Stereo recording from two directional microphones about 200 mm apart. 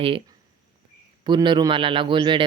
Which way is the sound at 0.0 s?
25° right (ahead or behind).